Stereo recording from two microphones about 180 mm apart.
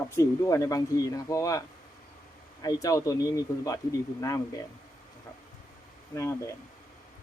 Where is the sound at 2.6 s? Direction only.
20° left (ahead or behind).